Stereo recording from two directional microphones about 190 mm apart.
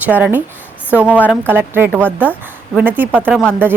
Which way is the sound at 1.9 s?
5° left (ahead or behind).